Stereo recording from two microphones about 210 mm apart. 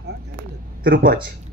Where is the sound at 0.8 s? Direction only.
45° right (ahead or behind).